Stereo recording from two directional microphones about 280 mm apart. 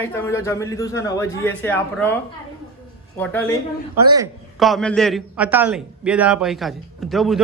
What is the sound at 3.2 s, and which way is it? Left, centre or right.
Speech, centre.